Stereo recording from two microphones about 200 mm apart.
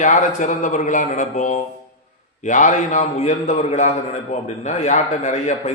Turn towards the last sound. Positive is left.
turn(degrees=35)  # may be behind; listen again after turning